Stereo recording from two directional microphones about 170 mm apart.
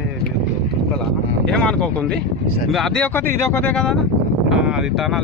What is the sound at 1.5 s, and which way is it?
Speech, 5° left (ahead or behind).